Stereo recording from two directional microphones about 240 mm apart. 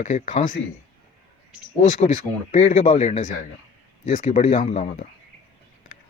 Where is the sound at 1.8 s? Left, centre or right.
Left.